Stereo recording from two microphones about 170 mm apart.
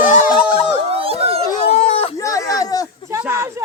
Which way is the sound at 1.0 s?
35° right (ahead or behind).